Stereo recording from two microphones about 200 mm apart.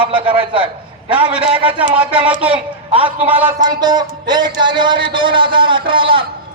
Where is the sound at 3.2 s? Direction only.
10° right (ahead or behind).